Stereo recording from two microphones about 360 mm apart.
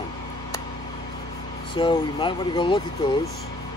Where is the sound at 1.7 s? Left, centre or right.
Centre.